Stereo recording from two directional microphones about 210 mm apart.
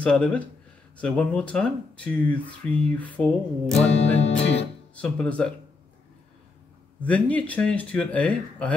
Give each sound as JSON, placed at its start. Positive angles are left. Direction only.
{"t": 0.0, "sound": "speech", "side_deg": 5}
{"t": 4.2, "sound": "music", "side_deg": 30}
{"t": 4.9, "sound": "speech", "side_deg": 5}
{"t": 7.0, "sound": "speech", "side_deg": 5}